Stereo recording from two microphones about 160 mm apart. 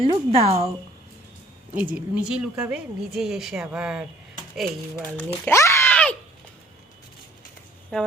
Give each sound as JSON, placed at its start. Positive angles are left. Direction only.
{"t": 0.0, "sound": "speech", "side_deg": -35}
{"t": 1.7, "sound": "a woman's voice", "side_deg": -10}
{"t": 5.1, "sound": "a child's voice", "side_deg": 15}
{"t": 7.9, "sound": "a woman's voice", "side_deg": 5}